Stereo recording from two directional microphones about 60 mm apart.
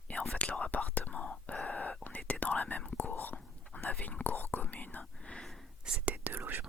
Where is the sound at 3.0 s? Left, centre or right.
Left.